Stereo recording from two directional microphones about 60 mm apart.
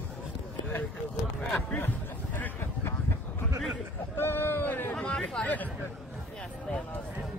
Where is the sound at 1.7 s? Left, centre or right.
Left.